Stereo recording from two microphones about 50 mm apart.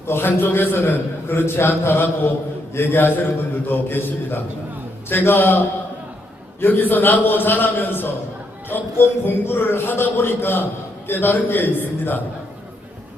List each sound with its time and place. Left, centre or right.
0.1 s a man's voice: left